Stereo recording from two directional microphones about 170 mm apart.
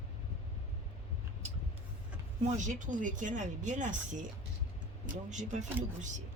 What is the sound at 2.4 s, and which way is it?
Speech, 45° right (ahead or behind).